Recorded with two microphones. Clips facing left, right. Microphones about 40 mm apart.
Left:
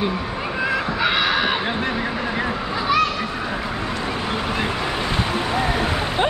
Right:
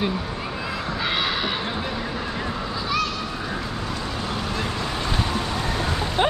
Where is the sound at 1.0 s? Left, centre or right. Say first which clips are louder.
Left 5 dB; left.